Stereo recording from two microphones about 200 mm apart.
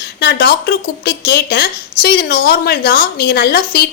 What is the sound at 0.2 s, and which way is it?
A woman's voice, 55° left (ahead or behind).